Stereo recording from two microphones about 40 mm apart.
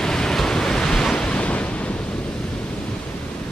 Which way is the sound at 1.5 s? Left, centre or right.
Left.